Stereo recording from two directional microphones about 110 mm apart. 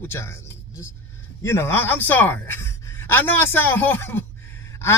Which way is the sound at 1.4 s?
25° left (ahead or behind).